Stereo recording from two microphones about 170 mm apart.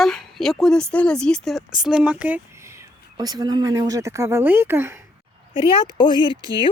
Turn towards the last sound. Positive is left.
turn(degrees=30)  # may be behind; listen again after turning